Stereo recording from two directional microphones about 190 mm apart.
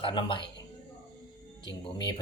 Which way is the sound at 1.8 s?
25° left (ahead or behind).